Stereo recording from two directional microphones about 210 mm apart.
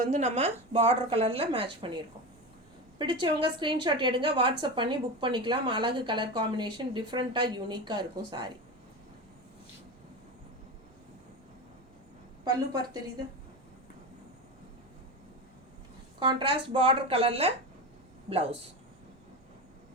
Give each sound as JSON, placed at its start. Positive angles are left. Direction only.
{"t": 0.0, "sound": "a woman's voice", "side_deg": -35}
{"t": 3.0, "sound": "a woman's voice", "side_deg": -20}
{"t": 12.5, "sound": "a woman's voice", "side_deg": -20}
{"t": 16.2, "sound": "a woman's voice", "side_deg": -25}